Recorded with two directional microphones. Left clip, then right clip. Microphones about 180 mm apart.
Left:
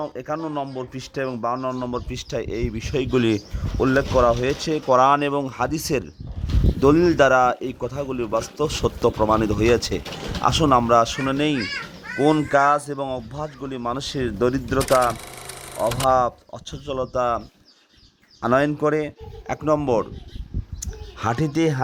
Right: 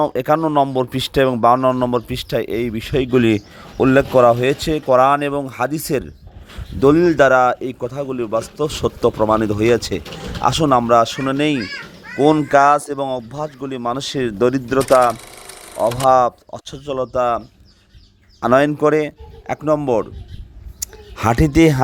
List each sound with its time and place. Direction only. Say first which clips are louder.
0.0 s speech: right 12 dB; 50° right (ahead or behind)
1.7 s speech: right 9 dB; 30° right (ahead or behind)
14.8 s speech: right 6 dB; centre (ahead or behind)
16.0 s speech: right 6 dB; 30° right (ahead or behind)
19.5 s speech: right 3 dB; 20° right (ahead or behind)
20.8 s a sound: right 7 dB; 25° right (ahead or behind)